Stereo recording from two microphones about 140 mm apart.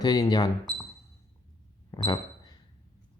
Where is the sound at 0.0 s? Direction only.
30° left (ahead or behind).